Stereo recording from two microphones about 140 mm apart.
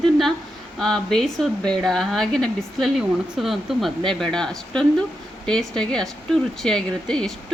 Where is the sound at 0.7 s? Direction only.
5° left (ahead or behind).